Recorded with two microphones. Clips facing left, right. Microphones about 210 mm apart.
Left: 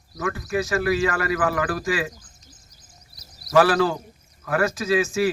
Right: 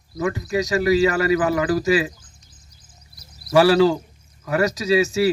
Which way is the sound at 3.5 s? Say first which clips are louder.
Right 4 dB; 10° right (ahead or behind).